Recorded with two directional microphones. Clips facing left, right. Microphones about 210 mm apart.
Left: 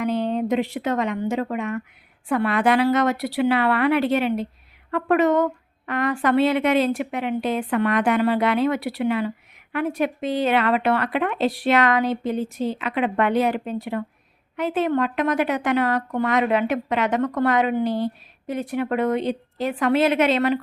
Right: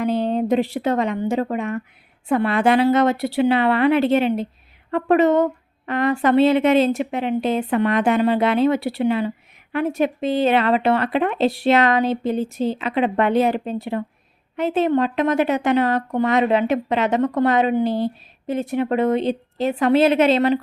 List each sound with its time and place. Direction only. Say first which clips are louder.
0.0 s a woman's voice: right 2 dB; 30° right (ahead or behind)